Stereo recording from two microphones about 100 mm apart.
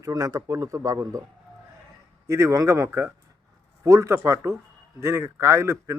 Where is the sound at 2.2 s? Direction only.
30° right (ahead or behind).